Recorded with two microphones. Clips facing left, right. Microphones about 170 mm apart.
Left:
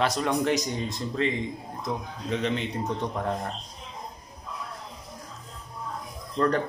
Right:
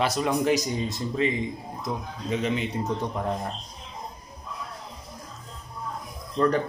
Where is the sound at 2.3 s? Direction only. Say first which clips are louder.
Right 1 dB; 5° right (ahead or behind).